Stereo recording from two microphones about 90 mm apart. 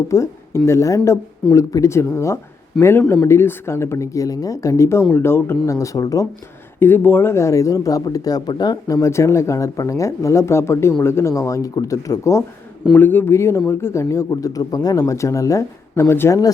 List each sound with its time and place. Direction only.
0.1 s speech: 30° left (ahead or behind)
2.8 s speech: 5° left (ahead or behind)
3.2 s speech: 30° left (ahead or behind)
6.7 s speech: 25° left (ahead or behind)
12.9 s a man's voice: 20° left (ahead or behind)